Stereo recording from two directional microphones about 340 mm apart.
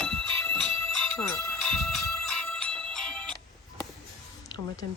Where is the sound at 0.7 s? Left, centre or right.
Right.